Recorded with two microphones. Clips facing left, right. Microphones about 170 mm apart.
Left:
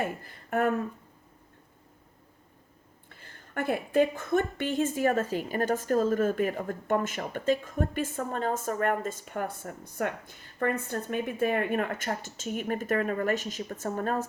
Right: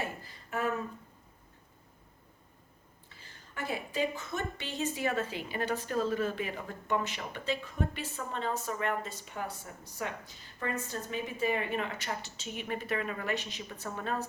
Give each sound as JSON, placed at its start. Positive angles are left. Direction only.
{"t": 0.0, "sound": "speech", "side_deg": 55}
{"t": 3.1, "sound": "a woman's voice", "side_deg": 55}